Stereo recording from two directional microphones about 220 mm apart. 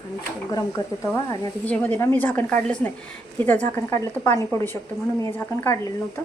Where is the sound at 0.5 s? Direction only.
15° left (ahead or behind).